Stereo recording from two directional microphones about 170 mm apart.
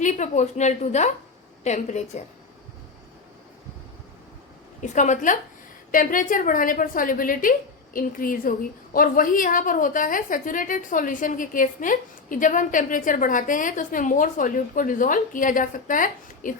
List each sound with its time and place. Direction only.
0.0 s a woman's voice: 45° left (ahead or behind)
4.8 s a woman's voice: 45° left (ahead or behind)